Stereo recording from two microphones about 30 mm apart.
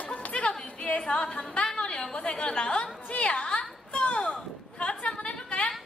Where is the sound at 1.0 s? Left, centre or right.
Left.